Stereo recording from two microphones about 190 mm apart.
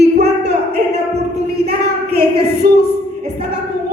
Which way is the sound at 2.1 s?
55° right (ahead or behind).